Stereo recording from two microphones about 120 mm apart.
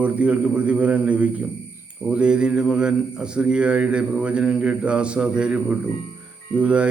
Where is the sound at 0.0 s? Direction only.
10° right (ahead or behind).